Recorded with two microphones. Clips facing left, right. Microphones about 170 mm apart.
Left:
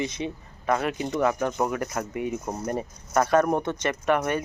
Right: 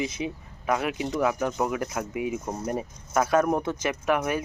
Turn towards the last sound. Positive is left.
turn(degrees=-5)  # may be behind; listen again after turning